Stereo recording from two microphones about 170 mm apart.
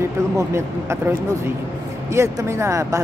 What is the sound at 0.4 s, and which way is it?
Speech, 15° right (ahead or behind).